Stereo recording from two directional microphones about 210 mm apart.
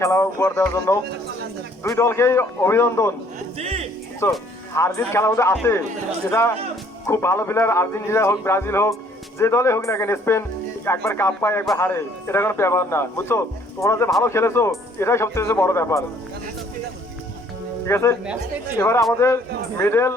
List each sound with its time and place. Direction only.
0.0 s a man's voice: 15° left (ahead or behind)
2.0 s a man's voice: 15° left (ahead or behind)
3.6 s speech: 30° right (ahead or behind)
4.2 s a man's voice: 15° left (ahead or behind)
7.1 s a man's voice: 10° left (ahead or behind)
17.8 s a man's voice: 15° left (ahead or behind)